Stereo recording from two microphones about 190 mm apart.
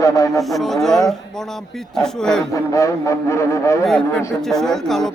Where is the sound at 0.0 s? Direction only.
15° left (ahead or behind).